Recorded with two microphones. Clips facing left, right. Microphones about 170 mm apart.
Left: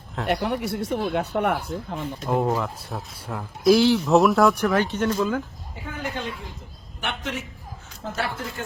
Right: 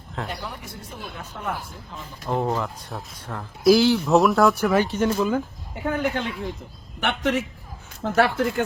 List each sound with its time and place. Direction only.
0.3 s speech: 75° left (ahead or behind)
2.2 s speech: 10° left (ahead or behind); by 5.4 s 10° right (ahead or behind)
5.8 s speech: 60° right (ahead or behind)